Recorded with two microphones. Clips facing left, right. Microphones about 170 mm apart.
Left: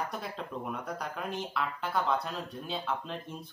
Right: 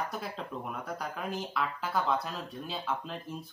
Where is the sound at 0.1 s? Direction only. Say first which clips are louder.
Even; centre (ahead or behind).